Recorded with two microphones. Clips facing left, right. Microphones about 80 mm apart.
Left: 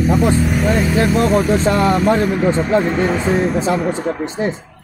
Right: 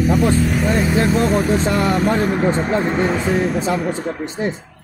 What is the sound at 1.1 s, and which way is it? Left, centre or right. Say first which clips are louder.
Speech: left 2 dB; left.